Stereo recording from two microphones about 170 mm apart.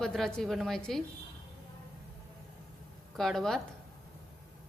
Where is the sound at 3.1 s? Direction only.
Centre (ahead or behind).